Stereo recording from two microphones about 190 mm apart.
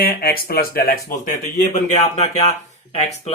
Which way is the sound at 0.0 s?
50° left (ahead or behind).